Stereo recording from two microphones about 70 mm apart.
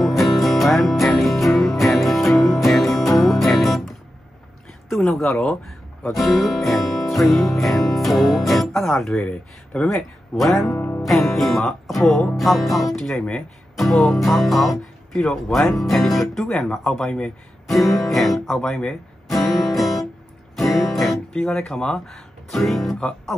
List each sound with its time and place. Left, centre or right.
0.0 s music: centre
4.8 s speech: centre
6.1 s music: centre
9.7 s speech: centre
11.0 s music: centre
13.7 s speech: centre
20.7 s music: centre
21.3 s speech: centre
22.9 s music: centre